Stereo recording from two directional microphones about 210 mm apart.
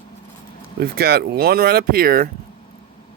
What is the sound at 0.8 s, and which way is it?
Speech, 50° right (ahead or behind).